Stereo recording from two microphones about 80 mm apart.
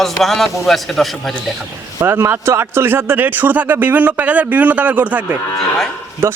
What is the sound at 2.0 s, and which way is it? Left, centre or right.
Speech, right.